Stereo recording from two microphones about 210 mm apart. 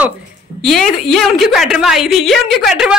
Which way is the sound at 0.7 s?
Centre (ahead or behind).